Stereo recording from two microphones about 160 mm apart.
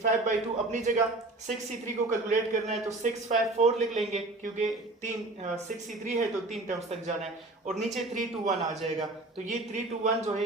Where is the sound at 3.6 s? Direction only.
45° right (ahead or behind).